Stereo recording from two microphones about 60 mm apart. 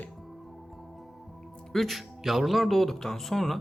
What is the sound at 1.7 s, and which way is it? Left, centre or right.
Speech, centre.